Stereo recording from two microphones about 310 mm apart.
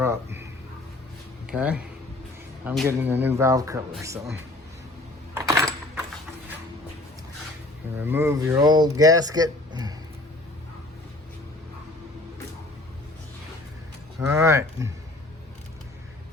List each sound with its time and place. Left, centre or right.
0.0 s a sound: centre
1.5 s speech: centre
5.4 s coin: centre
8.0 s speech: centre
14.2 s speech: centre